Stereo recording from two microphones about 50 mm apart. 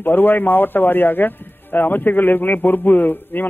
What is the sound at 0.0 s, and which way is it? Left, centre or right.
A man's voice, left.